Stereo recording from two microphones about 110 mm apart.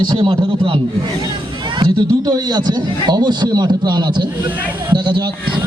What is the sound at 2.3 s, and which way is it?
A man's voice, 40° right (ahead or behind).